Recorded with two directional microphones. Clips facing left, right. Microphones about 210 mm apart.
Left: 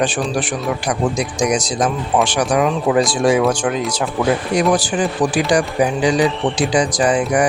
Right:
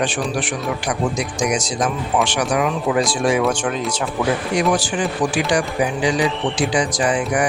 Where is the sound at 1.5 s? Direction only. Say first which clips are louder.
Left 3 dB; 35° left (ahead or behind).